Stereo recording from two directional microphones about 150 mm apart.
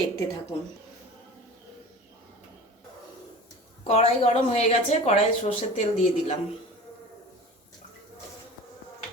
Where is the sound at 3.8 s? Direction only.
40° left (ahead or behind).